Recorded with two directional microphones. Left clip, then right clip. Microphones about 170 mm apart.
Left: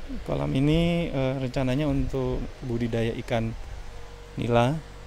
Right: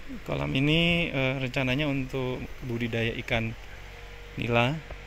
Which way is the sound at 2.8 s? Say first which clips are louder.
Left 1 dB; 20° left (ahead or behind).